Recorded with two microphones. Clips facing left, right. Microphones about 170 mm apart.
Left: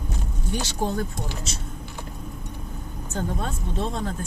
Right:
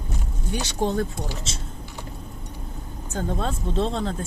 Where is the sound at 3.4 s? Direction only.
30° right (ahead or behind).